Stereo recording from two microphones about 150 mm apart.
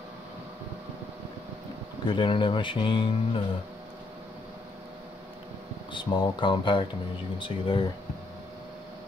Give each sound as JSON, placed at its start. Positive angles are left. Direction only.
{"t": 2.0, "sound": "speech", "side_deg": 35}
{"t": 5.9, "sound": "speech", "side_deg": 30}